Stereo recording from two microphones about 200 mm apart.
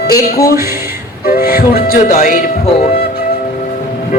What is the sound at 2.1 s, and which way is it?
Speech, 45° left (ahead or behind).